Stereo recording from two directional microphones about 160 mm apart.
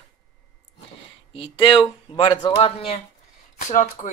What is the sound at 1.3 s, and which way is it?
A man's voice, 35° left (ahead or behind).